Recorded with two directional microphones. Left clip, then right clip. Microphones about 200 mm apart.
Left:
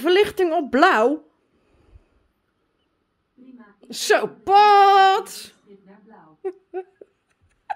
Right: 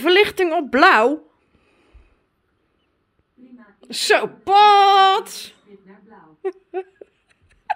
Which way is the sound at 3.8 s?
10° left (ahead or behind).